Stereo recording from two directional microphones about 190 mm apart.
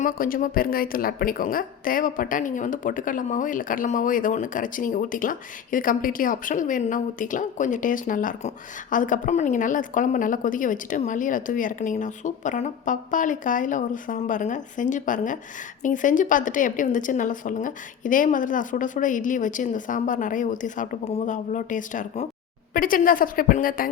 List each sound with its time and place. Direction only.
0.0 s a woman's voice: 50° left (ahead or behind)